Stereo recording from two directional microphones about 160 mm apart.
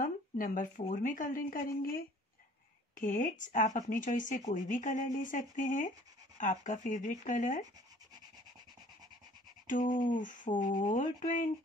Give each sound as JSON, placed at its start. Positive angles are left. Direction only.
{"t": 0.0, "sound": "speech", "side_deg": 55}
{"t": 9.7, "sound": "speech", "side_deg": 55}